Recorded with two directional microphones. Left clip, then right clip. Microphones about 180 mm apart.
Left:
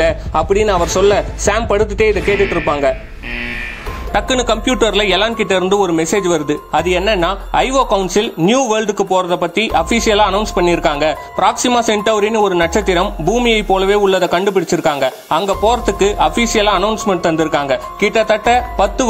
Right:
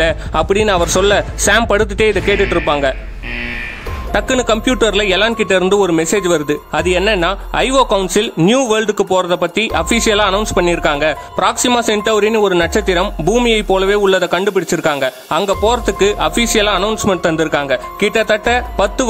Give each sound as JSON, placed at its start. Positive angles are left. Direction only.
{"t": 0.0, "sound": "a man's voice", "side_deg": -45}
{"t": 1.7, "sound": "a man's voice", "side_deg": -50}
{"t": 2.3, "sound": "speech", "side_deg": 0}
{"t": 2.6, "sound": "a man's voice", "side_deg": -50}
{"t": 4.1, "sound": "a man's voice", "side_deg": -35}